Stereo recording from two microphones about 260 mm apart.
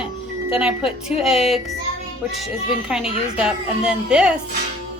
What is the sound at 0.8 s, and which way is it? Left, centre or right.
Speech, left.